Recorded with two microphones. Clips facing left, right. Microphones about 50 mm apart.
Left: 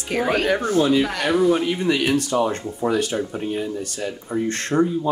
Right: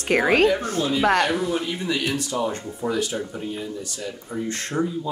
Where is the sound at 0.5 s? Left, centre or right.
Left.